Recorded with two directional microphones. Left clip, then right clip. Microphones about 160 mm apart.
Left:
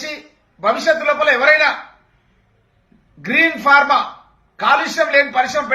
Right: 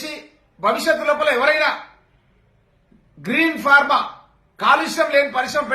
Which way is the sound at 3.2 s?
20° right (ahead or behind).